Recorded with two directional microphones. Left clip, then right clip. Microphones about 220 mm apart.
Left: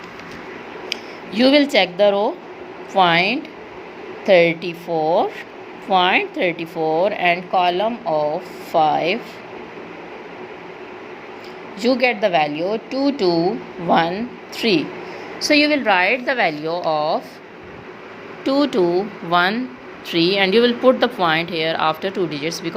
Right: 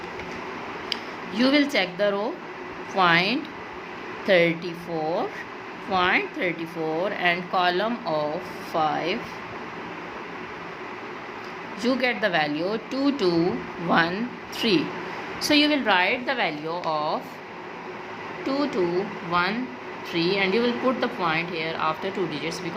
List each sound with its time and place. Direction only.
0.9 s a woman's voice: 20° left (ahead or behind)
11.8 s a woman's voice: 15° left (ahead or behind)
18.4 s speech: 30° left (ahead or behind)